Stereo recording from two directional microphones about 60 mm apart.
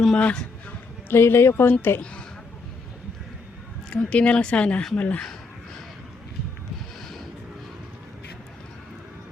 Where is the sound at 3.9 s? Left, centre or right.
Centre.